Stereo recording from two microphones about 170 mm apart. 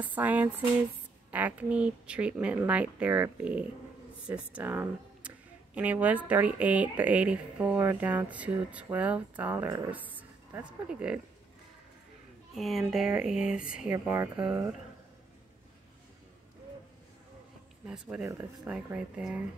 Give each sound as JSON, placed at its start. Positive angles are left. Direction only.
{"t": 0.0, "sound": "speech", "side_deg": -10}
{"t": 12.5, "sound": "speech", "side_deg": 0}
{"t": 17.8, "sound": "speech", "side_deg": -5}